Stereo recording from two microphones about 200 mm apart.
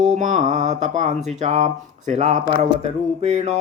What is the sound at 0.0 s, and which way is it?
Speech, 35° right (ahead or behind).